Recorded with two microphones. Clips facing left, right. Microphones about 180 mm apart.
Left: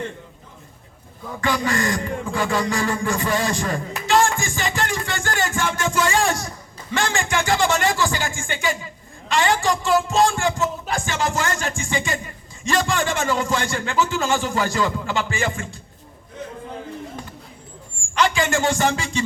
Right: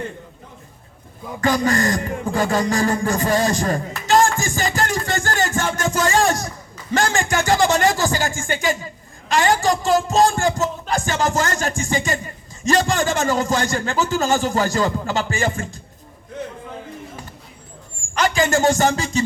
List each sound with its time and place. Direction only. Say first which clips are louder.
1.4 s a man's voice: right 4 dB; 40° right (ahead or behind)
18.1 s a man's voice: right 2 dB; 40° right (ahead or behind)